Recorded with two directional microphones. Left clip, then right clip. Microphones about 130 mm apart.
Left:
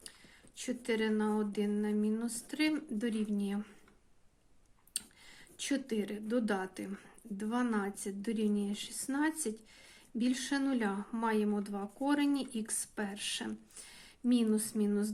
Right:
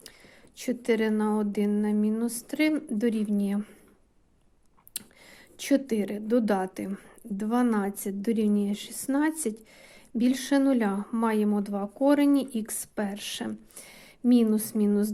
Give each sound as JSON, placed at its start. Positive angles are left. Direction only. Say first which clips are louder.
{"t": 0.5, "sound": "speech", "louder": "right 9 dB", "side_deg": -55}
{"t": 4.9, "sound": "speech", "louder": "right 2 dB", "side_deg": -55}